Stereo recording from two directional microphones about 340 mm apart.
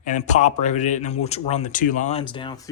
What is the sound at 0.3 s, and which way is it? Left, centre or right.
Speech, left.